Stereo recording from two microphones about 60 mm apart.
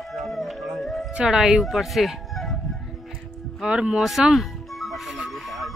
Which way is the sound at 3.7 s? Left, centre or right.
Centre.